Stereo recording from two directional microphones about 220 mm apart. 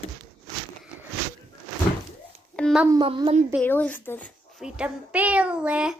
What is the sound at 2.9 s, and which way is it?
Speech, 20° right (ahead or behind).